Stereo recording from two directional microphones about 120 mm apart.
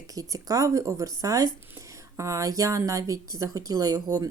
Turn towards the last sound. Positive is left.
turn(degrees=-30)  # may be behind; listen again after turning